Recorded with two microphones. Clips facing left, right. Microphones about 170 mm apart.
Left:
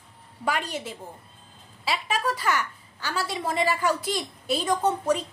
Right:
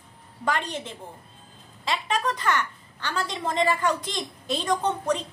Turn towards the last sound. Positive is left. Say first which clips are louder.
# left 2 dB
turn(degrees=10)  # may be behind; listen again after turning